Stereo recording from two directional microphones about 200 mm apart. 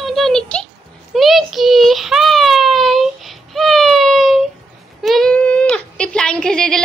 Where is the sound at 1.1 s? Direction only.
Centre (ahead or behind).